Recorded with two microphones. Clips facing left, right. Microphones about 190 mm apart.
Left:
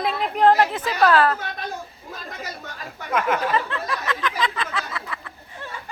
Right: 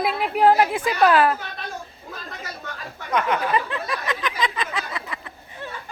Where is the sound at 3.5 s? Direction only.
15° right (ahead or behind).